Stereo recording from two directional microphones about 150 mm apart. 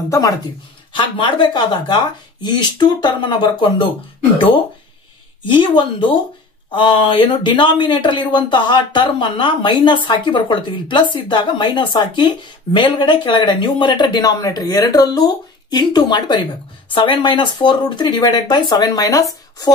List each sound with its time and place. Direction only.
0.1 s speech: 25° left (ahead or behind)
5.4 s speech: 30° left (ahead or behind)